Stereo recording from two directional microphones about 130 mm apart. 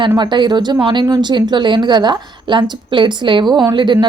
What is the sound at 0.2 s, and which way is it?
Speech, 35° right (ahead or behind).